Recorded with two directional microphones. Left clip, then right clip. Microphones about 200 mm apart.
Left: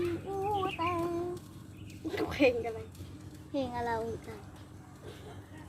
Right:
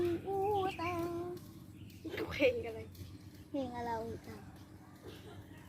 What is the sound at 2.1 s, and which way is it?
Speech, 50° left (ahead or behind).